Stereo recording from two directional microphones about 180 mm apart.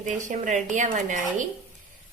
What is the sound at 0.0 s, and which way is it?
A woman's voice, 45° right (ahead or behind).